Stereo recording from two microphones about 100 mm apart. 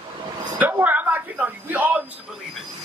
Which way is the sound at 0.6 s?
15° right (ahead or behind).